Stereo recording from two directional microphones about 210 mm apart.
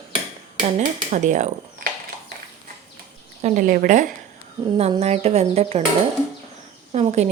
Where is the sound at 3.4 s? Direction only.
40° right (ahead or behind).